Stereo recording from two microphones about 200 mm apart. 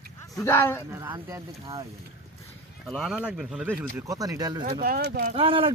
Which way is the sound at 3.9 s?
15° right (ahead or behind).